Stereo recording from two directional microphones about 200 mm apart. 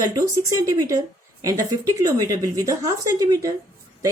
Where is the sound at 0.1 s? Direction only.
15° right (ahead or behind).